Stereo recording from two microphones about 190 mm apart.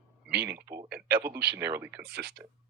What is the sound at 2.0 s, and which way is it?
Speech, 55° right (ahead or behind).